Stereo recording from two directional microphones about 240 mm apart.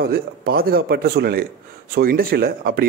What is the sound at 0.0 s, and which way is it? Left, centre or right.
A man's voice, right.